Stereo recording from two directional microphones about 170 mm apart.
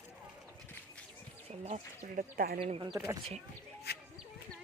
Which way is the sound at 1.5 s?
40° right (ahead or behind).